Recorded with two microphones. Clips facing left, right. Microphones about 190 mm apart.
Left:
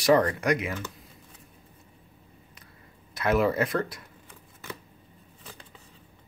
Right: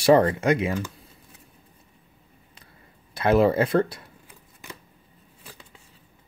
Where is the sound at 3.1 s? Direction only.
30° right (ahead or behind).